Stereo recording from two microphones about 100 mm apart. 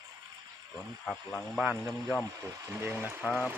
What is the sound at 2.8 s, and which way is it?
Speech, 20° right (ahead or behind).